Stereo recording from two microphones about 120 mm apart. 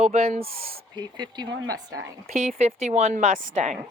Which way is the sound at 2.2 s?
65° right (ahead or behind).